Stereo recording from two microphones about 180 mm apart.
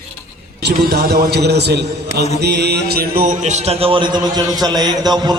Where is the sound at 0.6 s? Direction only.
60° right (ahead or behind).